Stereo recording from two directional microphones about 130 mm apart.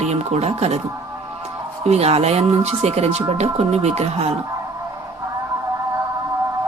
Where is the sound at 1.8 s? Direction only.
55° right (ahead or behind).